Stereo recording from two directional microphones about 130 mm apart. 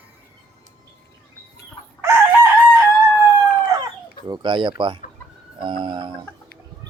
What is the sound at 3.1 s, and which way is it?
Howl, 30° left (ahead or behind).